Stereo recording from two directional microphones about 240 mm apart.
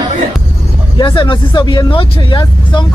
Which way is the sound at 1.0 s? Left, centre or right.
Centre.